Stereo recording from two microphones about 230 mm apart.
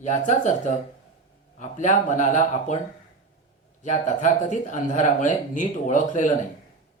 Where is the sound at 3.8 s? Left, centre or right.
Left.